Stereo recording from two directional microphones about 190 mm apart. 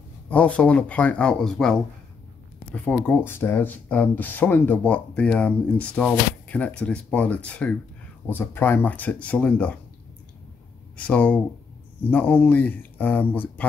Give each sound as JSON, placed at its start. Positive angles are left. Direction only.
{"t": 0.3, "sound": "speech", "side_deg": 5}
{"t": 11.0, "sound": "speech", "side_deg": 5}